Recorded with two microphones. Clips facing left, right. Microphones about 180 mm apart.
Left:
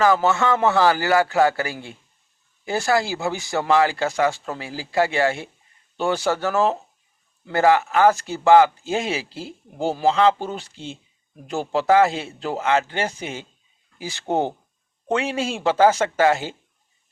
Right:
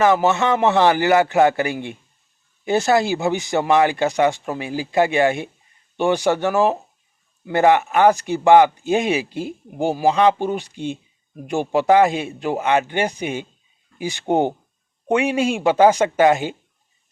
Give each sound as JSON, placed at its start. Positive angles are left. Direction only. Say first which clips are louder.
{"t": 0.0, "sound": "speech", "louder": "right 2 dB", "side_deg": -20}